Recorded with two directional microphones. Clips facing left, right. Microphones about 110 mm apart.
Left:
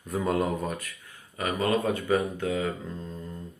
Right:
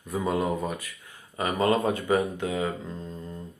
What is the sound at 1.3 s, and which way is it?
Speech, 25° right (ahead or behind).